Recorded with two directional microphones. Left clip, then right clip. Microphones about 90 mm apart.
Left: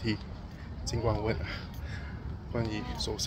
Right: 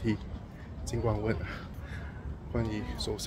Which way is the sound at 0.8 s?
65° right (ahead or behind).